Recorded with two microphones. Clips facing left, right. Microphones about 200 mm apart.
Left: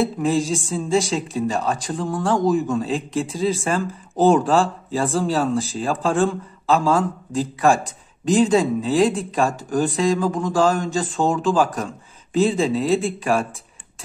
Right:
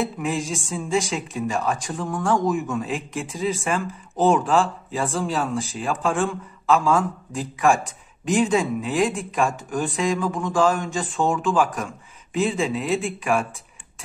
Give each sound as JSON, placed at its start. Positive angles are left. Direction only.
{"t": 0.0, "sound": "speech", "side_deg": 35}